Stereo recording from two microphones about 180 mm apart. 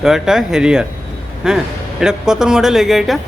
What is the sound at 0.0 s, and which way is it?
A man's voice, 5° right (ahead or behind).